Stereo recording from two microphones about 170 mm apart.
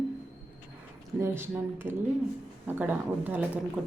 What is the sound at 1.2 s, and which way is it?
A woman's voice, 15° right (ahead or behind).